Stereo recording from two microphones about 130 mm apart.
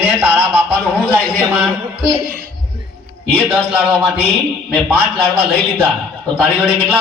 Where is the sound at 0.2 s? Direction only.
20° right (ahead or behind).